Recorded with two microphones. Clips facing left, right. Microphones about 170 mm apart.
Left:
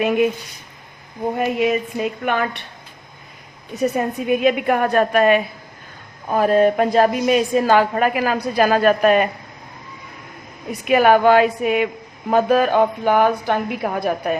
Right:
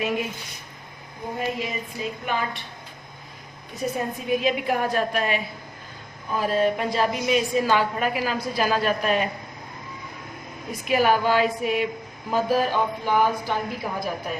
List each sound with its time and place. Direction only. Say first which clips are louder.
1.4 s a woman's voice: left 9 dB; 65° left (ahead or behind)
3.8 s a woman's voice: left 7 dB; 65° left (ahead or behind)
10.7 s a woman's voice: left 7 dB; 60° left (ahead or behind)